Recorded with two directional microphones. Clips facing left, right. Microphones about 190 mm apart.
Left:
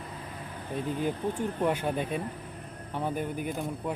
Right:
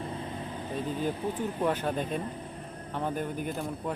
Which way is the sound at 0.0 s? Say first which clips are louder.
Right 5 dB; 25° right (ahead or behind).